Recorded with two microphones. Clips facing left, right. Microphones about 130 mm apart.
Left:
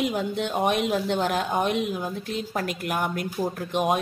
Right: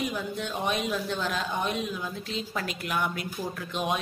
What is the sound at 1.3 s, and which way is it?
Speech, 45° left (ahead or behind).